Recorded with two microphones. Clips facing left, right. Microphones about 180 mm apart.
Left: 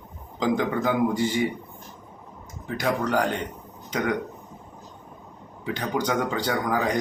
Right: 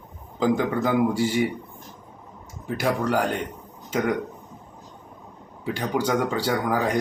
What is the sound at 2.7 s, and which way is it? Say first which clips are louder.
Speech: right 1 dB; 10° right (ahead or behind).